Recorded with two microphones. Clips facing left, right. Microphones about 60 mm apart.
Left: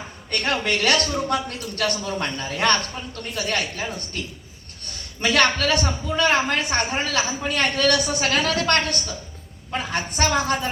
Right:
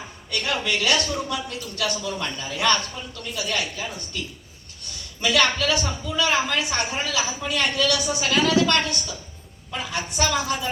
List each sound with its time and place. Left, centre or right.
0.3 s a woman's voice: left